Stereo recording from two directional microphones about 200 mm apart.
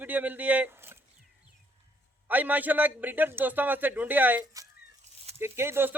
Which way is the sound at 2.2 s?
10° right (ahead or behind).